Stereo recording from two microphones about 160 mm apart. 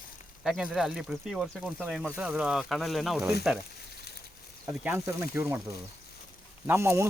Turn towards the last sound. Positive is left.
turn(degrees=-15)  # may be behind; listen again after turning